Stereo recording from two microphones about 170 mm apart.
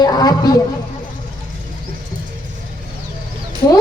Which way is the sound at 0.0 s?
25° left (ahead or behind).